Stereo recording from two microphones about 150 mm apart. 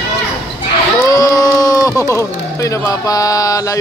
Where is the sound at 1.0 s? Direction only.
20° left (ahead or behind).